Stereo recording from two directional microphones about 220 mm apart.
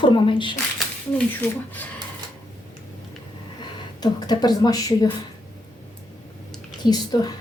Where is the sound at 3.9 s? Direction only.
20° left (ahead or behind).